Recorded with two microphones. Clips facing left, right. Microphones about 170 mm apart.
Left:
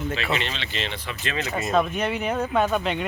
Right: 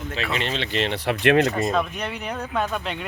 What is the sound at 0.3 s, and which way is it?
Speech, 50° right (ahead or behind).